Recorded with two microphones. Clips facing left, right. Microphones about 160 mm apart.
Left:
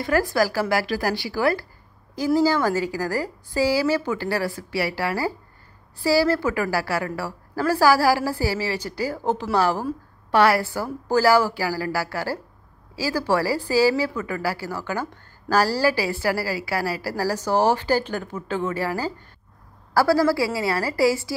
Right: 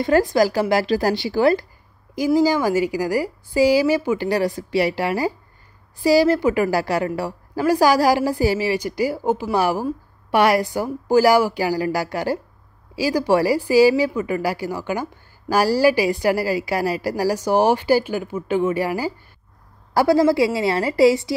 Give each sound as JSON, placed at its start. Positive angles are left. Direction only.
{"t": 0.0, "sound": "a woman's voice", "side_deg": -20}